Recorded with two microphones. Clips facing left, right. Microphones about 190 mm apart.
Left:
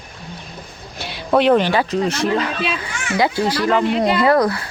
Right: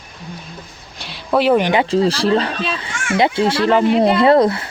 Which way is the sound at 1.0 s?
Centre (ahead or behind).